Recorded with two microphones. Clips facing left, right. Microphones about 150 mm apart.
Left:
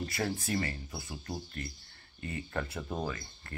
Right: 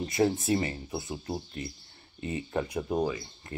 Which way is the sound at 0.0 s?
20° right (ahead or behind).